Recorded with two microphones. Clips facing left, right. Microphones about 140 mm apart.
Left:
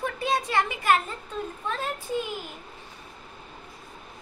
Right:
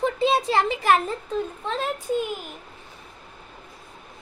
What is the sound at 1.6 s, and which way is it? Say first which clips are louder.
Speech: right 3 dB; 20° right (ahead or behind).